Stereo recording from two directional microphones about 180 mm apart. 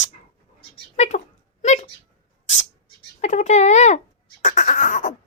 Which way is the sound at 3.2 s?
40° left (ahead or behind).